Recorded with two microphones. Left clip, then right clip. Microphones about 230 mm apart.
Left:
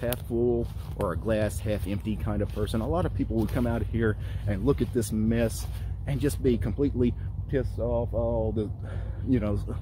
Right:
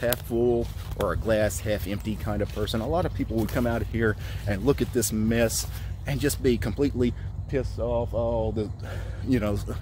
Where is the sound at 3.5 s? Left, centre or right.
Centre.